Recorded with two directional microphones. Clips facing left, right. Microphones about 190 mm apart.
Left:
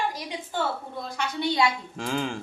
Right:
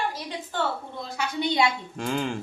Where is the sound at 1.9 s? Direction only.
Centre (ahead or behind).